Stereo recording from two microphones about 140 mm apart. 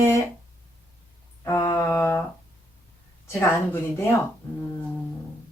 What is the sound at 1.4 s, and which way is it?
Speech, 20° left (ahead or behind).